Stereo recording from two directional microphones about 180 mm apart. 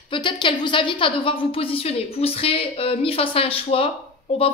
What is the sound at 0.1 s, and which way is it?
Speech, 25° left (ahead or behind).